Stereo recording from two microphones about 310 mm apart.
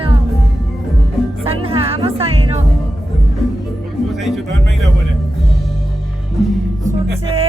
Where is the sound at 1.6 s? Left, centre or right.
Centre.